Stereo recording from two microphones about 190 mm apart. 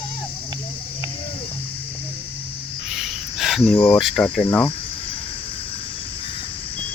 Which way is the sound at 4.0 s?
Centre (ahead or behind).